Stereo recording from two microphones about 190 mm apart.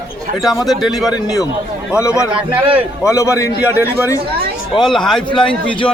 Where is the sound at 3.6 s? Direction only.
10° right (ahead or behind).